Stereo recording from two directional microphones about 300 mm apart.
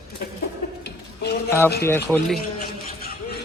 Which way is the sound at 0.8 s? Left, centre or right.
Left.